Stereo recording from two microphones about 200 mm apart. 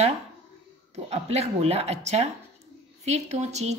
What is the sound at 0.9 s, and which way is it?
Speech, 30° right (ahead or behind).